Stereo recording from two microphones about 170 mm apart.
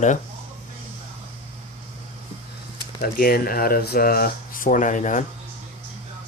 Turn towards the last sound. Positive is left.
turn(degrees=45)  # may be behind; listen again after turning